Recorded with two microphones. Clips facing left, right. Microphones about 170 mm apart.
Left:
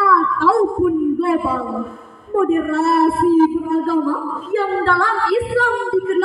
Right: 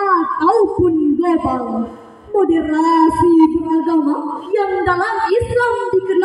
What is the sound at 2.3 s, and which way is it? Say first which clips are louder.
Child singing: right 3 dB; 40° right (ahead or behind).